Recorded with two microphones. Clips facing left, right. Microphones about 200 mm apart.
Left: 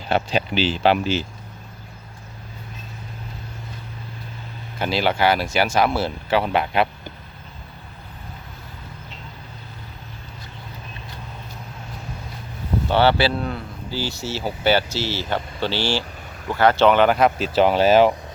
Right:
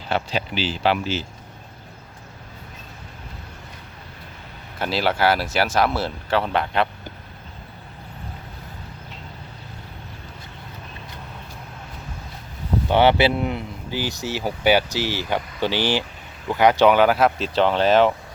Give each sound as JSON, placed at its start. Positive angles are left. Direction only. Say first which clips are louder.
{"t": 0.1, "sound": "speech", "louder": "left 3 dB", "side_deg": 20}
{"t": 4.8, "sound": "speech", "louder": "left 1 dB", "side_deg": 0}
{"t": 12.9, "sound": "speech", "louder": "right 1 dB", "side_deg": -20}